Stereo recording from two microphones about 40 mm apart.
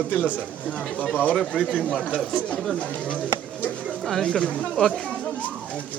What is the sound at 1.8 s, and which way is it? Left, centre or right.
Speech, left.